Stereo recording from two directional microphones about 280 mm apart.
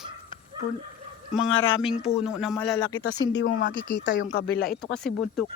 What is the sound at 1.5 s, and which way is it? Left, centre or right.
Speech, left.